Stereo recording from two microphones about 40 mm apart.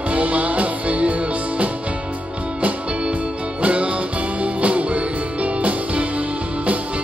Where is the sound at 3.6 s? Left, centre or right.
Right.